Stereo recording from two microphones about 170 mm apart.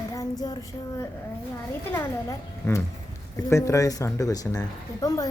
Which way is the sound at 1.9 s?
15° left (ahead or behind).